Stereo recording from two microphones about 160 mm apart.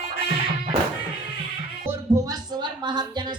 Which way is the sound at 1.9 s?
20° right (ahead or behind).